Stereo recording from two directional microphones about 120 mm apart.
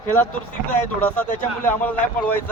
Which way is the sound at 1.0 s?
10° left (ahead or behind).